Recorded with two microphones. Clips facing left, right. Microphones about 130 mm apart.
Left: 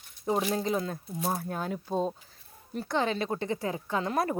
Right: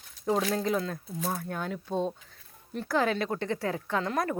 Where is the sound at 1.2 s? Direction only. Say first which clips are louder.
Left 2 dB; 25° left (ahead or behind).